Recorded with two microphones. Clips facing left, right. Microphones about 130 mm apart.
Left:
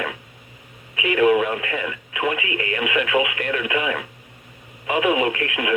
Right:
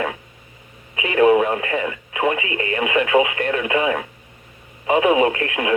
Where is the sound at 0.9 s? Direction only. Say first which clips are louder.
Right 2 dB; 30° right (ahead or behind).